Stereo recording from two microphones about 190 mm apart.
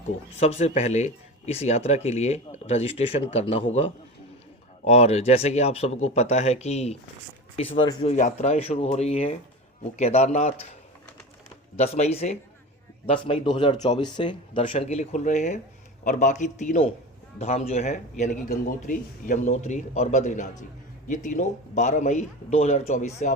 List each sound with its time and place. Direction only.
0.3 s speech: 30° left (ahead or behind)
4.9 s speech: 35° left (ahead or behind)
8.1 s speech: 40° left (ahead or behind)
11.8 s speech: 35° left (ahead or behind)